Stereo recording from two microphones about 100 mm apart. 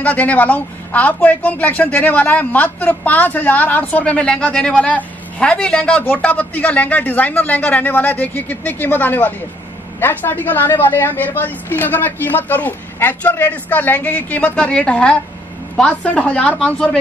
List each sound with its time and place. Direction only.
0.0 s a woman's voice: 15° left (ahead or behind)